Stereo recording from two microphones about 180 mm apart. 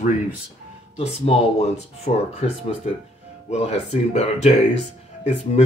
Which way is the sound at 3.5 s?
35° left (ahead or behind).